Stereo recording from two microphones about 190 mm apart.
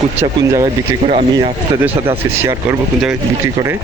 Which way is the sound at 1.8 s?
15° right (ahead or behind).